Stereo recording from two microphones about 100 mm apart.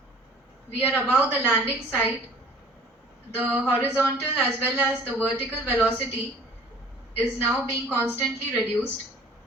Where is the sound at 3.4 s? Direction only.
20° right (ahead or behind).